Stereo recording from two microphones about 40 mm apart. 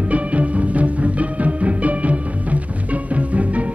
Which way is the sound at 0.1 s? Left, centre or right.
Right.